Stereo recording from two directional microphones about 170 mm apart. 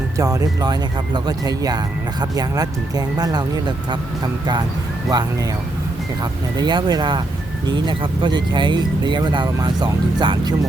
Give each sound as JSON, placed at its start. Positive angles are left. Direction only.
{"t": 0.2, "sound": "speech", "side_deg": -20}
{"t": 6.6, "sound": "speech", "side_deg": -25}